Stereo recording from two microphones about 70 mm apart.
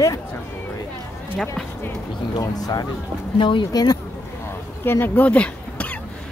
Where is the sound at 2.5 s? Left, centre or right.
Left.